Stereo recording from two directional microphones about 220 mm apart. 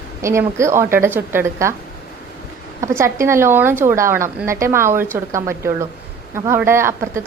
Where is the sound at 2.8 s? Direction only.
15° right (ahead or behind).